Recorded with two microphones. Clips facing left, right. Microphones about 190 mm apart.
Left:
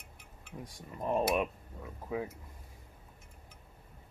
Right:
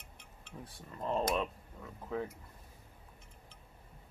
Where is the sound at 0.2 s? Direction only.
10° left (ahead or behind).